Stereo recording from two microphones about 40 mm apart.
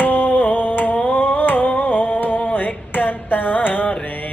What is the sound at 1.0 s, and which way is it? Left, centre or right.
Humming, left.